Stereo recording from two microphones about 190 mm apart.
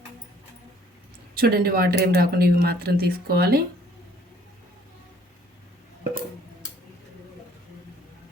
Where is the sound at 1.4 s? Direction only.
55° right (ahead or behind).